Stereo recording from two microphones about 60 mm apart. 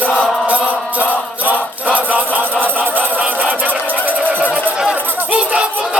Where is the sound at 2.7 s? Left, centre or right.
Right.